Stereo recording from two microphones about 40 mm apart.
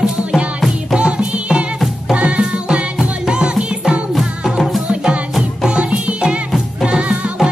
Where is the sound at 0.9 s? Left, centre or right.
Right.